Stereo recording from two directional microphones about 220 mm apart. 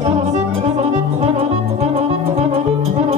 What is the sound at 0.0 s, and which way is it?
Music, 30° right (ahead or behind).